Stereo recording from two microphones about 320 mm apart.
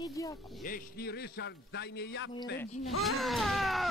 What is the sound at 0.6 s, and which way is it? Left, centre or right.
A man's voice, left.